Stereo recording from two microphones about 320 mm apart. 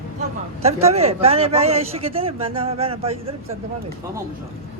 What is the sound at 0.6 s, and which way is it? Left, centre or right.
Speech, centre.